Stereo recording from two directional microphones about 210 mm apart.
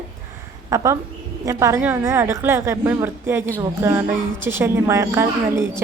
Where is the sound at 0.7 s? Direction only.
15° right (ahead or behind).